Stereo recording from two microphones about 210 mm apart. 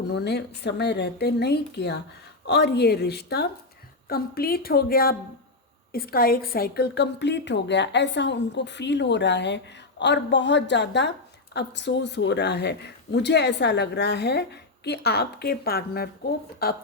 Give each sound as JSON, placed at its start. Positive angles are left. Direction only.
{"t": 0.1, "sound": "a woman's voice", "side_deg": 55}